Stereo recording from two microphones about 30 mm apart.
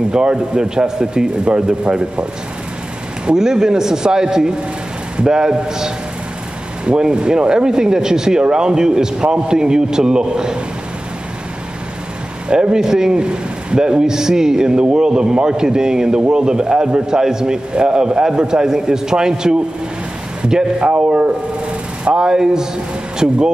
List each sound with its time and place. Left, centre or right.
0.1 s a man's voice: right
3.3 s speech: right
12.4 s speech: right
13.2 s speech: right
22.0 s speech: right